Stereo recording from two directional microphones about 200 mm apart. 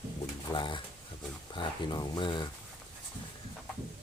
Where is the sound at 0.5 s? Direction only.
25° left (ahead or behind).